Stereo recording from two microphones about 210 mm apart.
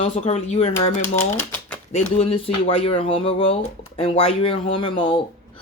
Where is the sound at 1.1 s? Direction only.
10° left (ahead or behind).